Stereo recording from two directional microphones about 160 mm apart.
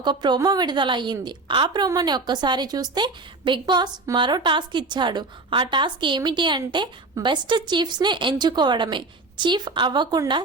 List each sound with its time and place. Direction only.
0.0 s a woman's voice: 30° right (ahead or behind)